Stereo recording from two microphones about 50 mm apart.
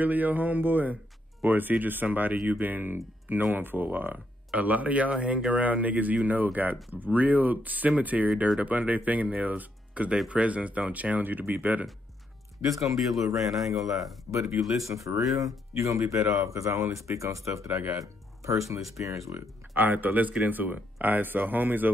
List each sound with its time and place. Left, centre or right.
0.0 s speech: right
4.5 s speech: right
12.7 s speech: centre
14.3 s speech: right
14.9 s speech: right
19.3 s speech: right